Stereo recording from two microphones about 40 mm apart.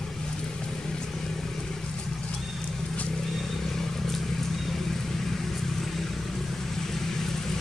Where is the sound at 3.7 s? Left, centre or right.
Centre.